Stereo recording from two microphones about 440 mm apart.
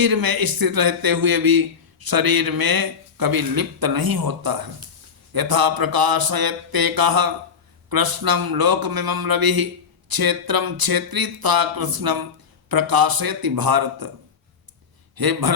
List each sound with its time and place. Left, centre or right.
0.0 s speech: right
15.1 s a man's voice: right